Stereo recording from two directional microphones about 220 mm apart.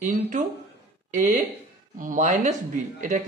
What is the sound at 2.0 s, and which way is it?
A man's voice, 35° right (ahead or behind).